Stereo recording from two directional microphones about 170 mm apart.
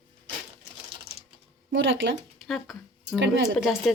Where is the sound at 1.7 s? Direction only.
90° right.